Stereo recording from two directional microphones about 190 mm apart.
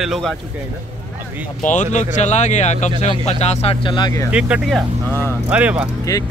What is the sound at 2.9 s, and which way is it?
Speech, 25° right (ahead or behind).